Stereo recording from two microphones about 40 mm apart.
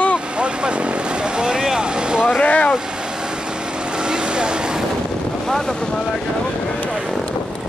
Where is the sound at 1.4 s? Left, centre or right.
Centre.